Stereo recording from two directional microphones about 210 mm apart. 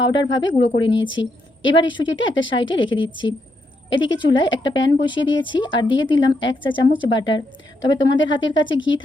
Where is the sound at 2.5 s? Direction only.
20° left (ahead or behind).